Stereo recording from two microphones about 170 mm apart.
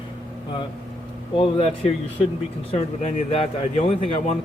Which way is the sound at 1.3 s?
35° left (ahead or behind).